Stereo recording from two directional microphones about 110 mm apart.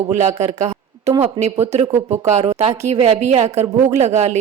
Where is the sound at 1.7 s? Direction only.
85° right.